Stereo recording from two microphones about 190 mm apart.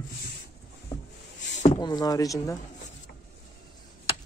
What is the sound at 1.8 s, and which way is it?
Speech, 20° left (ahead or behind).